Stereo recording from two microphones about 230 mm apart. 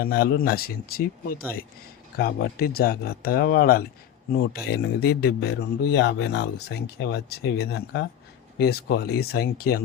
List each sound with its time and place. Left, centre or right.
0.0 s speech: left